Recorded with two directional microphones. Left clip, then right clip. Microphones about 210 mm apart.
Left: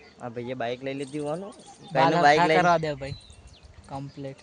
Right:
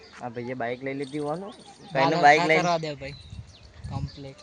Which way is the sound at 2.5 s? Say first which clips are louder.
Left 3 dB; 35° left (ahead or behind).